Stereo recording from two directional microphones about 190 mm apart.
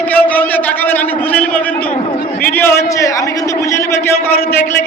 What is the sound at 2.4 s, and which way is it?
A man's voice, 10° left (ahead or behind).